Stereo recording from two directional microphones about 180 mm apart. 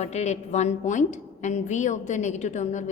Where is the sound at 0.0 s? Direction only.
40° left (ahead or behind).